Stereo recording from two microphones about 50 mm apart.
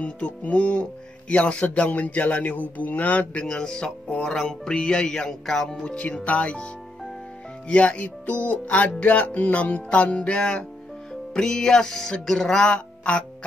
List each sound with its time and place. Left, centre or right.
0.0 s speech: left
3.5 s speech: centre